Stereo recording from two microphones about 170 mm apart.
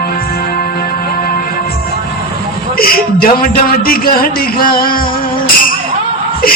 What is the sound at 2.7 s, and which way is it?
A man's voice, 60° left (ahead or behind).